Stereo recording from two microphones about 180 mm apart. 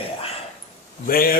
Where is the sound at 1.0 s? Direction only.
55° left (ahead or behind).